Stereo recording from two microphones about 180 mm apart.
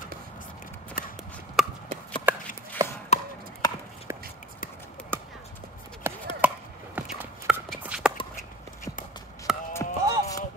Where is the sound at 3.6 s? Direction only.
20° left (ahead or behind).